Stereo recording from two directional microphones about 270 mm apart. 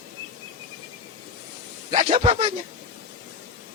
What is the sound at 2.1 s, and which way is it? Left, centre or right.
Speech, centre.